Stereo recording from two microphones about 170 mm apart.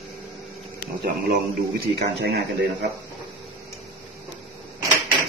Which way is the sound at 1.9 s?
85° right.